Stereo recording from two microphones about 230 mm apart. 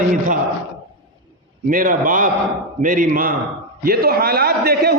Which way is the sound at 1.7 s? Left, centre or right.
Right.